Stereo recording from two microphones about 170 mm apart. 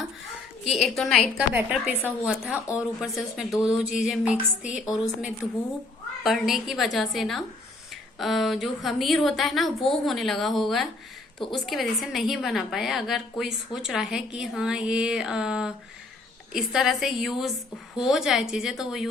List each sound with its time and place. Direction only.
0.7 s a woman's voice: centre (ahead or behind)